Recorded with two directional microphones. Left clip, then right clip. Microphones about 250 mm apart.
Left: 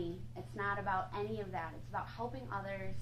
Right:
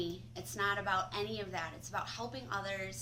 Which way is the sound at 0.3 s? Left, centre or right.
Right.